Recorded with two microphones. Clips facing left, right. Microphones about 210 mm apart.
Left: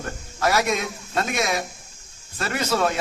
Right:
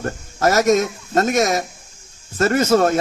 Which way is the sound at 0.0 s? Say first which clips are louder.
Right 6 dB; 45° right (ahead or behind).